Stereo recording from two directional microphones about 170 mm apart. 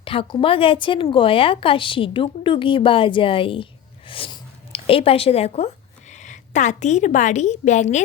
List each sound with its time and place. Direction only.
0.0 s speech: 30° left (ahead or behind)